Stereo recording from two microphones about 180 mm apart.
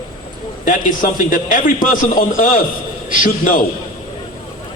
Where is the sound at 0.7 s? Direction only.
50° left (ahead or behind).